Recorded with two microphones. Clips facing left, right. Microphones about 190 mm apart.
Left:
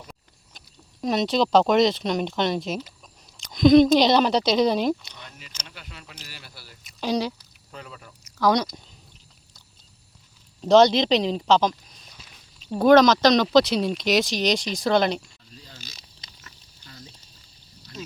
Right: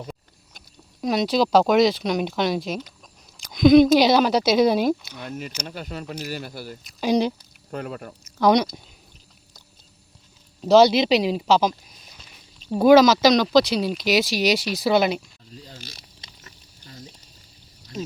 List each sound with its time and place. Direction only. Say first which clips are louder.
1.0 s speech: right 1 dB; centre (ahead or behind)
5.2 s speech: right 13 dB; 45° right (ahead or behind)
7.0 s speech: right 4 dB; 15° right (ahead or behind)
7.7 s speech: right 11 dB; 55° right (ahead or behind)
8.4 s speech: right 3 dB; 20° right (ahead or behind)
10.6 s speech: right 1 dB; 5° right (ahead or behind)
16.2 s a sound: right 2 dB; 25° right (ahead or behind)